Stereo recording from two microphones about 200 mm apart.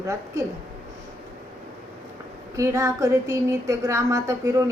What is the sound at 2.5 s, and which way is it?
Speech, 15° right (ahead or behind).